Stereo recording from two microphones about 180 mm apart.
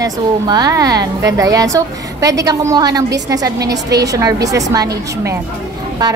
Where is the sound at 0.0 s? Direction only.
20° right (ahead or behind).